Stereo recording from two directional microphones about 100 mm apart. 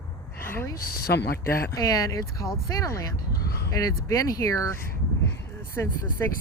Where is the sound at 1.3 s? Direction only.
30° left (ahead or behind).